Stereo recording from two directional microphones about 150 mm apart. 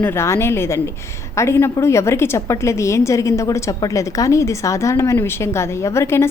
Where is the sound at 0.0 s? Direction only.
15° left (ahead or behind).